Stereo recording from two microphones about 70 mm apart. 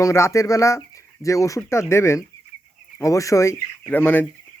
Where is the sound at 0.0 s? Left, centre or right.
Left.